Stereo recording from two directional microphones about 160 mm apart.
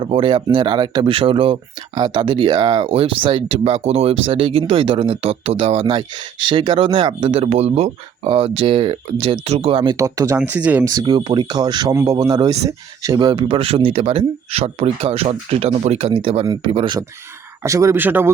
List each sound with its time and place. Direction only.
0.0 s speech: 30° right (ahead or behind); by 10.8 s 10° right (ahead or behind)
10.8 s speech: 25° right (ahead or behind)
17.6 s speech: 20° right (ahead or behind)